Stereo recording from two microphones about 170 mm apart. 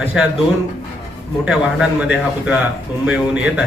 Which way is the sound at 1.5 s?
5° right (ahead or behind).